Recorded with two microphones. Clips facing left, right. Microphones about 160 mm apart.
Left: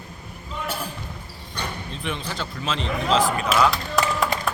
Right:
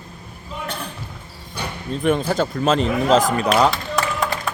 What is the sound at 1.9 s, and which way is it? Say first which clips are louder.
Speech: right 16 dB; 45° right (ahead or behind).